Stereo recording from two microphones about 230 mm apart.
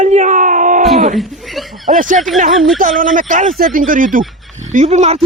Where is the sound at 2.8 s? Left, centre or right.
Right.